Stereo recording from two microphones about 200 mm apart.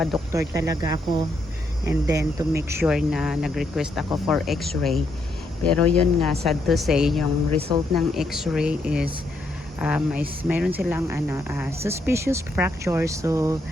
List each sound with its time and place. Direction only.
0.3 s speech: 15° right (ahead or behind)